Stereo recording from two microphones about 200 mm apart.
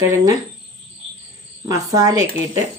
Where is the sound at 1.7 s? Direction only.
20° right (ahead or behind).